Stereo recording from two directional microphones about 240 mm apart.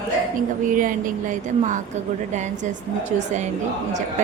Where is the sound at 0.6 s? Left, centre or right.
Right.